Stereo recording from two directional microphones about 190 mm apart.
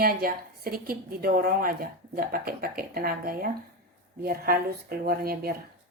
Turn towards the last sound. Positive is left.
turn(degrees=-55)  # may be behind; listen again after turning